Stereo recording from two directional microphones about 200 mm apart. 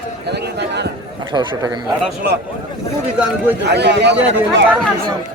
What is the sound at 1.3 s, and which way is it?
Speech, 20° right (ahead or behind).